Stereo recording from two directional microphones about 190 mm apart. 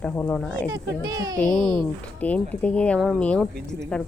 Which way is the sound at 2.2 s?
5° left (ahead or behind).